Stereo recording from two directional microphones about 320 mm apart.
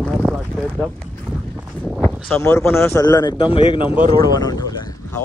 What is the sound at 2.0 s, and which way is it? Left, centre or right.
Speech, centre.